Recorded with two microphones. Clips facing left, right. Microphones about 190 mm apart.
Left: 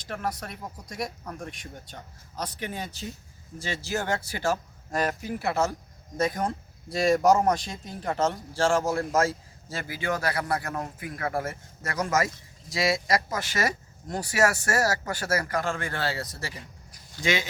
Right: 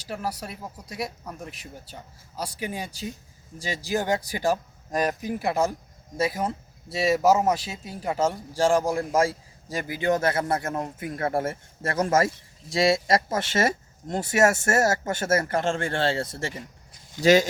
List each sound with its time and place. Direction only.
0.0 s speech: 10° right (ahead or behind); by 17.0 s 25° right (ahead or behind)